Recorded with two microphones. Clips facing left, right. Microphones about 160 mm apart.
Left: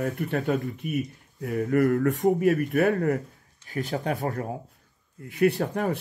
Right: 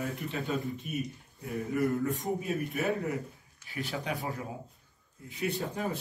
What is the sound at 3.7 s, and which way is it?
Speech, 45° left (ahead or behind).